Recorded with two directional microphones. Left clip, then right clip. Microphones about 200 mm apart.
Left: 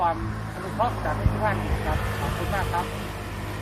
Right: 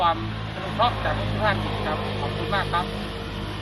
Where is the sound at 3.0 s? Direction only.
45° left (ahead or behind).